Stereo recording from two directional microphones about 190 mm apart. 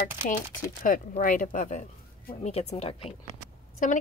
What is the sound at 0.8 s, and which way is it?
A woman's voice, 45° left (ahead or behind).